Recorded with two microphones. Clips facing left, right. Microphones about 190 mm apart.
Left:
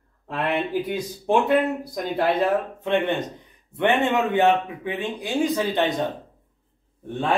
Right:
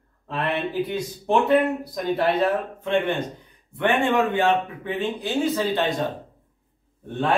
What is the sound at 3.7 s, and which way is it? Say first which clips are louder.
Speech: even; 25° left (ahead or behind).